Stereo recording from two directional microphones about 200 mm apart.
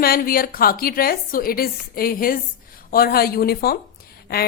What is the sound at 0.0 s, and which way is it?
A woman's voice, 50° left (ahead or behind).